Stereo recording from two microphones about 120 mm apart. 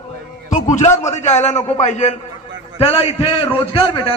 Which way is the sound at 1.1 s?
75° left (ahead or behind).